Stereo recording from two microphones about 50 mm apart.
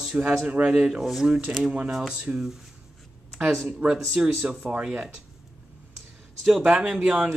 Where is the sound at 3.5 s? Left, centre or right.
Centre.